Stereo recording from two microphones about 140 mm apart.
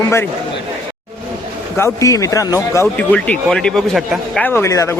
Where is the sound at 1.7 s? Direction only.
20° left (ahead or behind).